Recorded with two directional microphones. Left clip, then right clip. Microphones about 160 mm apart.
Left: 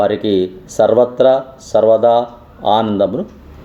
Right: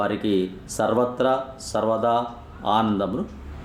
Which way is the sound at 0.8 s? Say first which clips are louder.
Left 11 dB; 30° left (ahead or behind).